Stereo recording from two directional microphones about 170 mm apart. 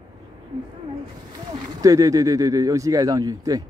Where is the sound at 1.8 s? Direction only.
20° right (ahead or behind).